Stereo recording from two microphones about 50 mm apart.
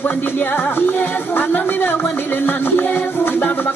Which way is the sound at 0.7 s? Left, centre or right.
Left.